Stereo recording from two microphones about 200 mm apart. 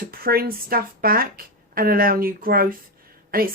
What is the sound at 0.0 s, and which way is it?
A woman's voice, 45° right (ahead or behind).